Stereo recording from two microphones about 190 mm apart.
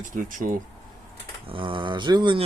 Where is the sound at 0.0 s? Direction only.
45° right (ahead or behind).